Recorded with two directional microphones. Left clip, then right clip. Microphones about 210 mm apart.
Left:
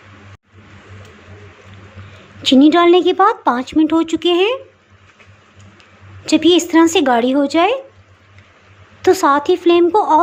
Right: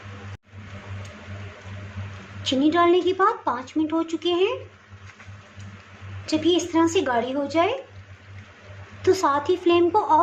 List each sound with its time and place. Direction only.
2.4 s speech: 35° left (ahead or behind)
6.2 s speech: 40° left (ahead or behind)
9.0 s speech: 30° left (ahead or behind)